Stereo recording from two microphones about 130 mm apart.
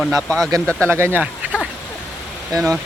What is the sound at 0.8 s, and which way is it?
Speech, 20° right (ahead or behind).